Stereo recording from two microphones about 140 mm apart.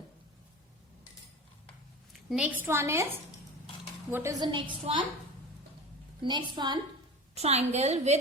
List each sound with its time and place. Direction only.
2.6 s a woman's voice: 15° right (ahead or behind)
4.1 s a woman's voice: 20° right (ahead or behind)
4.4 s a woman's voice: 35° right (ahead or behind)
6.2 s a woman's voice: 30° right (ahead or behind)
7.3 s a woman's voice: 50° right (ahead or behind)